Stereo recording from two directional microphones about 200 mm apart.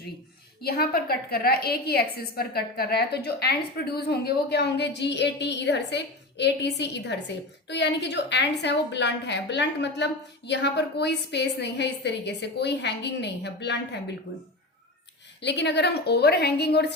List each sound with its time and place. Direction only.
0.6 s a woman's voice: 50° left (ahead or behind)
15.4 s a woman's voice: 60° left (ahead or behind)